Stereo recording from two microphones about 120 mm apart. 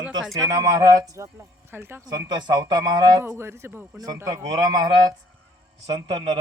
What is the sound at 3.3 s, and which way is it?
Speech, 20° right (ahead or behind).